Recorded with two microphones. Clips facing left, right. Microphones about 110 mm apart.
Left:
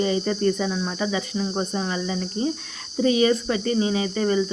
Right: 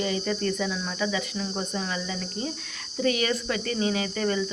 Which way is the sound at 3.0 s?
25° left (ahead or behind).